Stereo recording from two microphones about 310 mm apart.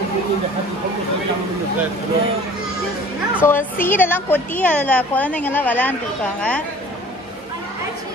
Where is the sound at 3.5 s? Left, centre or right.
Centre.